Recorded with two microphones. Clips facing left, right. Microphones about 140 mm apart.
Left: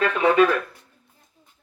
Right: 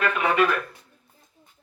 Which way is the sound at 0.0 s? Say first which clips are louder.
Left 4 dB; 30° left (ahead or behind).